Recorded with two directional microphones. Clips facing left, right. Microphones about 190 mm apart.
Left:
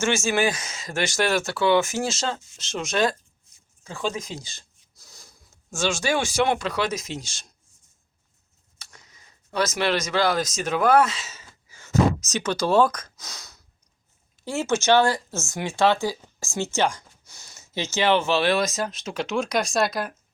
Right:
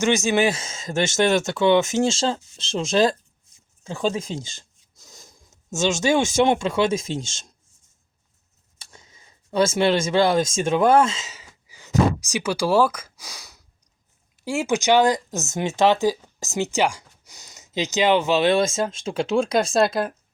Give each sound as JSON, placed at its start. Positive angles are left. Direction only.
{"t": 0.0, "sound": "speech", "side_deg": -20}
{"t": 8.8, "sound": "speech", "side_deg": -25}